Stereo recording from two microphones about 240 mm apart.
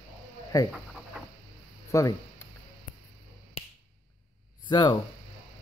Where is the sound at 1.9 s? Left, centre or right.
Centre.